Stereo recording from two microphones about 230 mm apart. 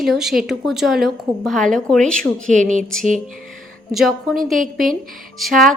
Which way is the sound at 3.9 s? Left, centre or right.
Centre.